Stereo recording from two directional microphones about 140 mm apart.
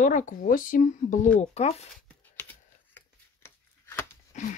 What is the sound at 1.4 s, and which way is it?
Speech, 50° left (ahead or behind).